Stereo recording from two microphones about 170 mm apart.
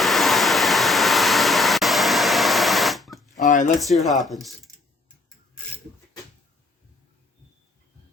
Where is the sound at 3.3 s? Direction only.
45° left (ahead or behind).